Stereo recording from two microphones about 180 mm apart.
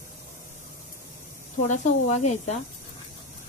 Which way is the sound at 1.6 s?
40° left (ahead or behind).